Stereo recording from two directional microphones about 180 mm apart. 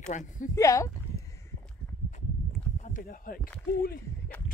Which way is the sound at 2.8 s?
50° left (ahead or behind).